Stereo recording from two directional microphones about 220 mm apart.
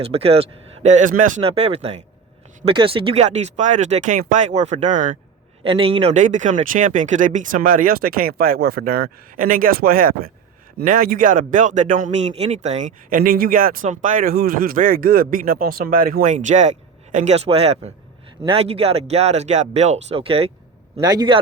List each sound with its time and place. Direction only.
0.0 s speech: 25° right (ahead or behind)
5.6 s speech: 25° right (ahead or behind)